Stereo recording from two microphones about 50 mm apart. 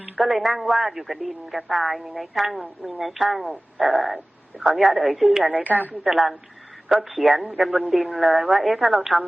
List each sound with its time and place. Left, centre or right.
0.2 s speech: centre
5.7 s a woman's voice: right
6.1 s speech: centre